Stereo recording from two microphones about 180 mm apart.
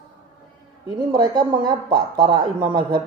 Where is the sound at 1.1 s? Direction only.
25° right (ahead or behind).